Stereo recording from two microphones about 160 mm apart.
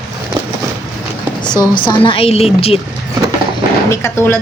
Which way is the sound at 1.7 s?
30° left (ahead or behind).